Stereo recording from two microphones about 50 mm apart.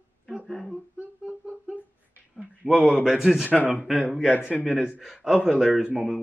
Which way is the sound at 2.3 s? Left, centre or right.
Centre.